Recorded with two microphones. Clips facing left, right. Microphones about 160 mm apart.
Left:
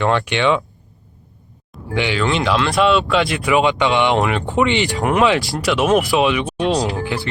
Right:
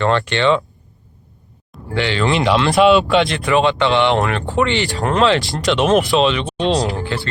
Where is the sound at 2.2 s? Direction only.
Centre (ahead or behind).